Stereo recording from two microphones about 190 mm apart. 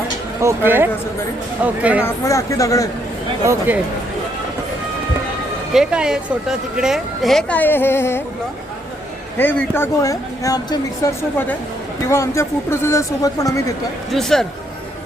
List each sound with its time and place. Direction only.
0.4 s speech: 10° right (ahead or behind)
2.0 s speech: 15° left (ahead or behind)
3.4 s speech: 15° right (ahead or behind)
5.7 s a woman's voice: 5° right (ahead or behind); by 8.2 s 10° left (ahead or behind)
9.4 s speech: 10° left (ahead or behind)
14.1 s a woman's voice: centre (ahead or behind)